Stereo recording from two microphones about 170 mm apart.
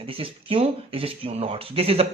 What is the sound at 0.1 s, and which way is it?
A man's voice, 30° right (ahead or behind).